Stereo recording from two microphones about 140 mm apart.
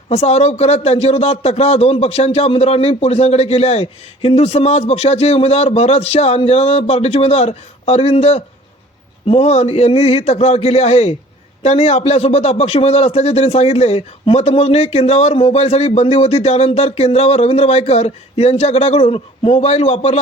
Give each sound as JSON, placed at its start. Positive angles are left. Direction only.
{"t": 0.1, "sound": "speech", "side_deg": 50}